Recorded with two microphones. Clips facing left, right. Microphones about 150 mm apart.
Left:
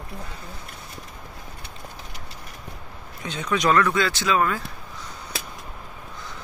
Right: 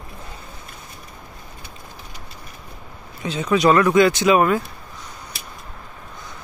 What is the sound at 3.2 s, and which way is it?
Speech, 5° right (ahead or behind).